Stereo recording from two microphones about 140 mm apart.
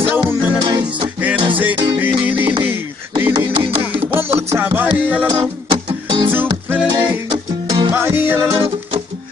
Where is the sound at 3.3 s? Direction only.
35° right (ahead or behind).